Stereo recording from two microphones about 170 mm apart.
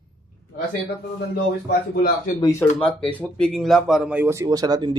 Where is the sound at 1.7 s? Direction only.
60° left (ahead or behind).